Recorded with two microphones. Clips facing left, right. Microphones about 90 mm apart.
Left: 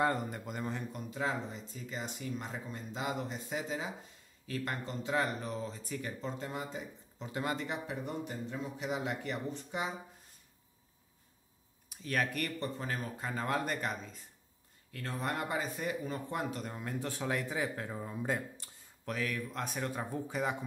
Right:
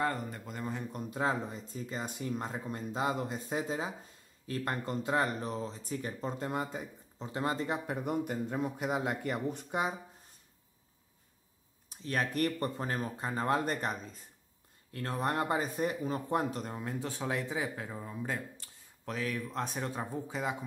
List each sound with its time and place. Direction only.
0.0 s a man's voice: 10° left (ahead or behind)
0.9 s speech: 40° right (ahead or behind)
6.3 s speech: 45° right (ahead or behind)
7.2 s speech: 30° right (ahead or behind)
9.5 s speech: 55° right (ahead or behind)
11.9 s speech: 30° right (ahead or behind)
12.5 s speech: 50° right (ahead or behind)
16.7 s speech: 20° right (ahead or behind)
17.8 s speech: 5° right (ahead or behind)
19.0 s speech: 20° right (ahead or behind)